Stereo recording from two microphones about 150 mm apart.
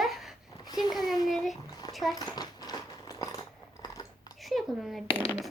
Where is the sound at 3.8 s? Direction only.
25° left (ahead or behind).